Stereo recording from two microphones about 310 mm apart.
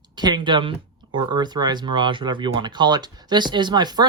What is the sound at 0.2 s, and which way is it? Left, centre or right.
Speech, centre.